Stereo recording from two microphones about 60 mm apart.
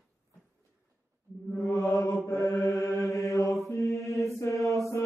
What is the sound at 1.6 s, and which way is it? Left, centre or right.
Mantra, left.